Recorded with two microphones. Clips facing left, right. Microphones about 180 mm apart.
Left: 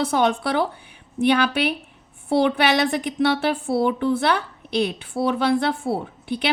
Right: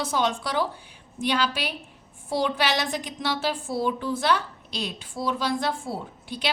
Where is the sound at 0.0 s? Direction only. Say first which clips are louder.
Left 6 dB; 60° left (ahead or behind).